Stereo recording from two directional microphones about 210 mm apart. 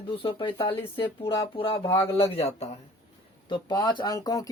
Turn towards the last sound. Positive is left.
turn(degrees=15)  # may be behind; listen again after turning